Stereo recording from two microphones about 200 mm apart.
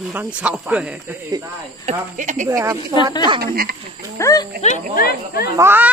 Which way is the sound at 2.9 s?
20° left (ahead or behind).